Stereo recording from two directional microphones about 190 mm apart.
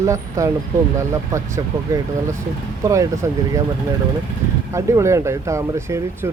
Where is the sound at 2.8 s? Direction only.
15° right (ahead or behind).